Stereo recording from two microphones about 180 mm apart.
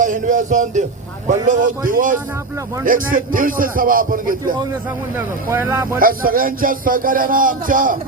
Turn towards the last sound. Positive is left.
turn(degrees=-50)  # may be behind; listen again after turning